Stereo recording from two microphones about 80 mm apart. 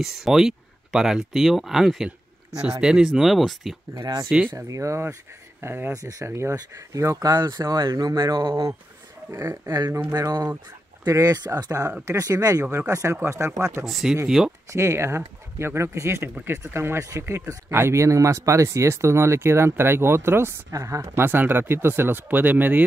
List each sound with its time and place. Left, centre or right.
0.0 s speech: centre
3.9 s speech: right
4.6 s speech: right
5.9 s speech: right
9.3 s speech: right
12.0 s speech: right
13.8 s speech: centre
14.7 s speech: right
20.7 s speech: right
21.2 s speech: right